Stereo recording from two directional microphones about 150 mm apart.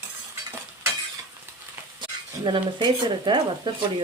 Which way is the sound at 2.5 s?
30° right (ahead or behind).